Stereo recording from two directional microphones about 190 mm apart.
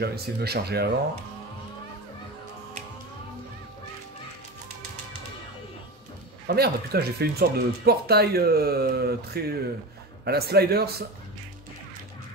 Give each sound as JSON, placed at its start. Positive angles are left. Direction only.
{"t": 0.0, "sound": "speech", "side_deg": -55}
{"t": 6.4, "sound": "speech", "side_deg": -55}